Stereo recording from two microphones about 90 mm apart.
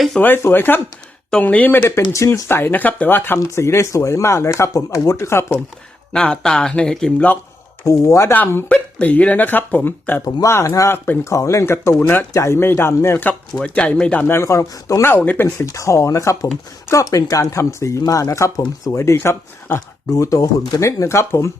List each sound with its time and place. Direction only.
0.2 s speech: 20° left (ahead or behind)
2.1 s speech: 35° left (ahead or behind)
3.3 s speech: 35° left (ahead or behind)
6.1 s speech: 10° left (ahead or behind)
7.9 s speech: 35° left (ahead or behind)
8.3 s speech: 20° left (ahead or behind)
10.2 s speech: 35° left (ahead or behind)
11.3 s speech: 35° left (ahead or behind)
13.6 s speech: 10° left (ahead or behind)
14.3 s speech: 30° left (ahead or behind)
15.0 s speech: 20° left (ahead or behind)
15.4 s speech: 35° left (ahead or behind)
20.1 s speech: 40° left (ahead or behind)